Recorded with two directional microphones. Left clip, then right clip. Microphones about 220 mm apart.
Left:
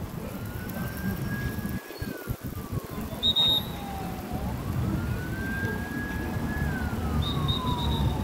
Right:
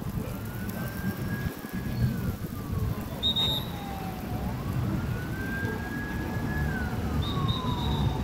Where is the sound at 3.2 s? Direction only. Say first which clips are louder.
Left 3 dB; 10° left (ahead or behind).